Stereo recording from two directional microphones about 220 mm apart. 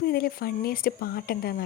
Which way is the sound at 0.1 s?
45° left (ahead or behind).